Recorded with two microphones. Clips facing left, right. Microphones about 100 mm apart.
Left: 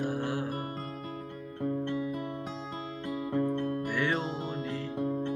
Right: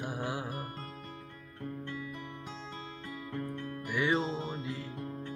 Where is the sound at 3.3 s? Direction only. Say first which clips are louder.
Left 10 dB; 30° left (ahead or behind).